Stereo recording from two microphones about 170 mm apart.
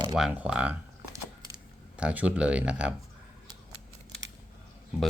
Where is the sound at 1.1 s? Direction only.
20° right (ahead or behind).